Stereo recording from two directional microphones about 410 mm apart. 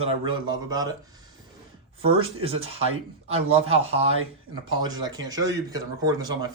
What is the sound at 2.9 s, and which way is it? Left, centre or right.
Speech, right.